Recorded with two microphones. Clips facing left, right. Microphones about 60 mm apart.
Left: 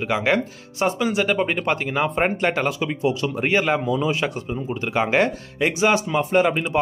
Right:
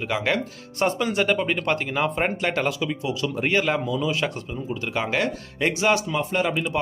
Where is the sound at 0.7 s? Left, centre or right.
Centre.